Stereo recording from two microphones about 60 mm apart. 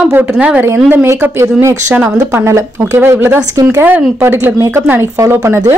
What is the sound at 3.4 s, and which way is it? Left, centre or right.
Speech, right.